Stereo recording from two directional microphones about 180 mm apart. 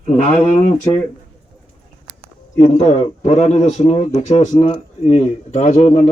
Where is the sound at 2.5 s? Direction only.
40° left (ahead or behind).